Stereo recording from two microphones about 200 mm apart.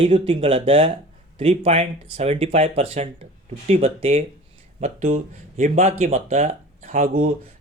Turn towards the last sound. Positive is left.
turn(degrees=-35)  # may be behind; listen again after turning